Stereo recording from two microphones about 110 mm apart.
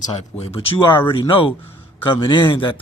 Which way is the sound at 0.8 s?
45° left (ahead or behind).